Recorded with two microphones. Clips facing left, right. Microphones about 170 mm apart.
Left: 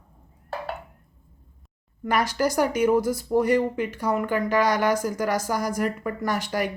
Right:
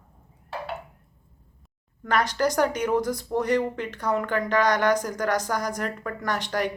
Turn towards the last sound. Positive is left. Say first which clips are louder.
# left 1 dB
turn(degrees=10)  # may be behind; listen again after turning